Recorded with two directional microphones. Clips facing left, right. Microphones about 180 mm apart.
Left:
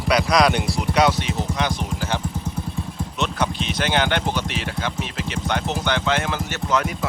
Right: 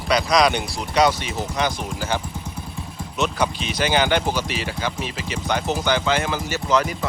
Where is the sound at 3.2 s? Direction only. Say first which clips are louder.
Right 2 dB; centre (ahead or behind).